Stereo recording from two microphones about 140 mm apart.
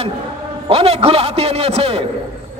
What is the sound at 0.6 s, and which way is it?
A man's voice, 45° right (ahead or behind).